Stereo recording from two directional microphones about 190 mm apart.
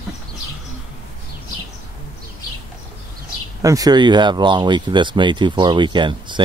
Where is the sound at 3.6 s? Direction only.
20° right (ahead or behind).